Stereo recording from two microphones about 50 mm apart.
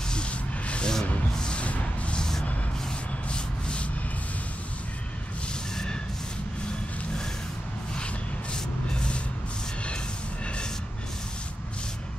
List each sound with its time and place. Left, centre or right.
0.1 s rub: left
1.3 s music: centre
3.3 s a sound: left